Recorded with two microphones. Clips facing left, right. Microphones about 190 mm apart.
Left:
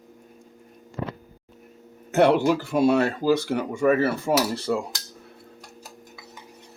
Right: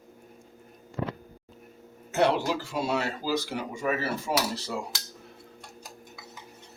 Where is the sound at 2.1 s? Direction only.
55° left (ahead or behind).